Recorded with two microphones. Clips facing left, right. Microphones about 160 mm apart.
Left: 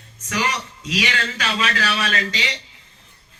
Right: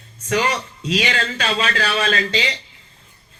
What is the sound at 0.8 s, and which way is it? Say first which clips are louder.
A man's voice: right 3 dB; 30° right (ahead or behind).